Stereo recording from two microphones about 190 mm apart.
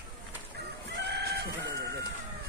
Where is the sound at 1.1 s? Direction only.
60° right (ahead or behind).